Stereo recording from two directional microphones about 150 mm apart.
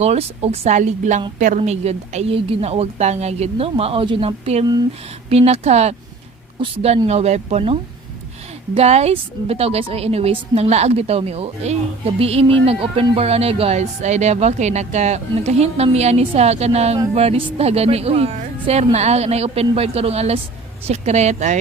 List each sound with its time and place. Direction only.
0.0 s a woman's voice: 45° right (ahead or behind)